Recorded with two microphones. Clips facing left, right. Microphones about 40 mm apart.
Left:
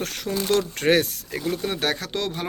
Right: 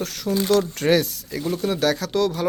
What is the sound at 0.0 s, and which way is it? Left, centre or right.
Speech, left.